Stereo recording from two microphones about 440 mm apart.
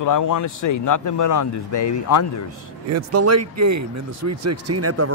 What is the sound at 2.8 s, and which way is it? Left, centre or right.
Speech, right.